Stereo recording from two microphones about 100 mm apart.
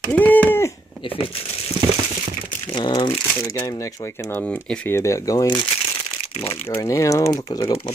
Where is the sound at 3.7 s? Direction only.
35° left (ahead or behind).